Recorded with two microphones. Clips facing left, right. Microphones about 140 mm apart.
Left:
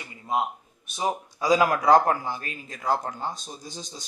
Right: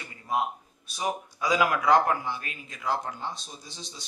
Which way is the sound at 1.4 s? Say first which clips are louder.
Left 4 dB; 35° left (ahead or behind).